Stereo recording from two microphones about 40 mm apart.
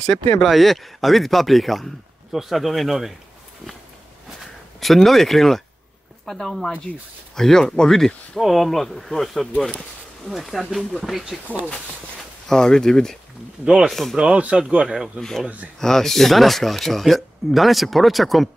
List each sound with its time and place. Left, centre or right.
0.4 s speech: centre
4.7 s speech: centre
8.4 s speech: centre
11.1 s speech: centre
11.4 s speech: right
12.4 s speech: centre
14.1 s speech: right
15.1 s speech: centre